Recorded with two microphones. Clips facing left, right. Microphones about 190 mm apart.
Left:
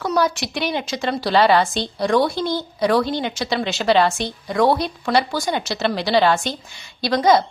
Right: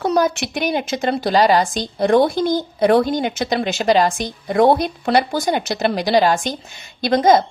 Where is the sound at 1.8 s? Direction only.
50° right (ahead or behind).